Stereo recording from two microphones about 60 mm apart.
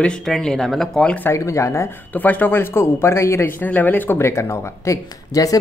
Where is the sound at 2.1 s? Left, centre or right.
Left.